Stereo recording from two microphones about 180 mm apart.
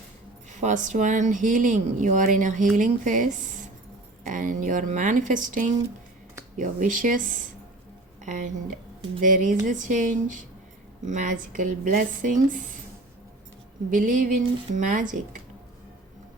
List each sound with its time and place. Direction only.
0.5 s speech: 45° right (ahead or behind)
13.9 s speech: 50° right (ahead or behind)